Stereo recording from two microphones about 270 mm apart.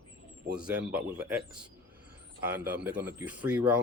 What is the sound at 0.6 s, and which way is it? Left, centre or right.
Speech, centre.